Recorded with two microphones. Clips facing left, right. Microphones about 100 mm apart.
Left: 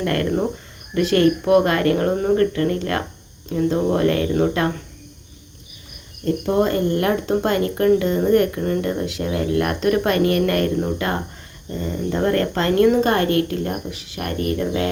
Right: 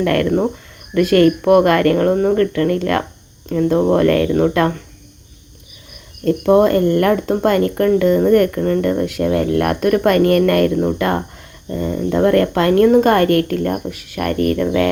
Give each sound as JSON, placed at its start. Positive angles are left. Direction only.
{"t": 0.0, "sound": "speech", "side_deg": -60}
{"t": 2.5, "sound": "speech", "side_deg": -60}
{"t": 6.2, "sound": "speech", "side_deg": -60}